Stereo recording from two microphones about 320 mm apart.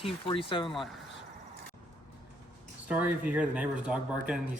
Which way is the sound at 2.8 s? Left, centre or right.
Centre.